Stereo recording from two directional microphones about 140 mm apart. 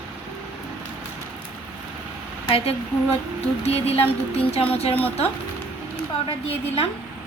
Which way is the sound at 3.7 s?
45° left (ahead or behind).